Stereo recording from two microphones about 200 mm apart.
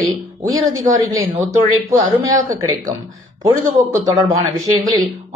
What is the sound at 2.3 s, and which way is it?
Speech, 15° right (ahead or behind).